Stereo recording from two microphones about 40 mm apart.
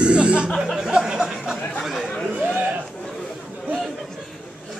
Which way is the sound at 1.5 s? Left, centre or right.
Centre.